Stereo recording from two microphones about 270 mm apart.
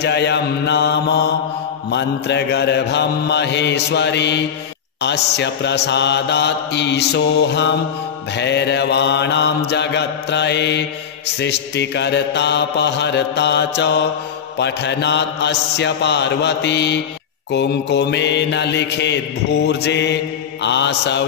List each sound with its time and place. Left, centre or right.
0.0 s mantra: left